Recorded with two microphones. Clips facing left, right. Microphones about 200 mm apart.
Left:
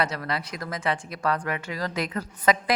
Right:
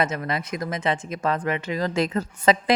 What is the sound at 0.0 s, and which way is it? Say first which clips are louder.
Speech: right 3 dB; 20° right (ahead or behind).